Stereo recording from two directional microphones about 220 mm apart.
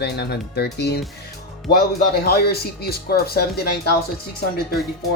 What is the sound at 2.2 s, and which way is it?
Speech, 45° left (ahead or behind).